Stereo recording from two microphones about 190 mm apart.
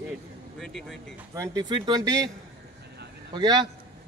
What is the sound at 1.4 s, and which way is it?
Speech, 20° right (ahead or behind).